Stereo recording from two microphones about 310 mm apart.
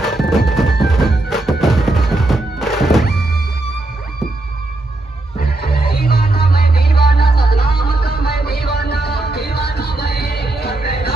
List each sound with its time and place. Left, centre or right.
0.0 s music: centre
5.4 s music: left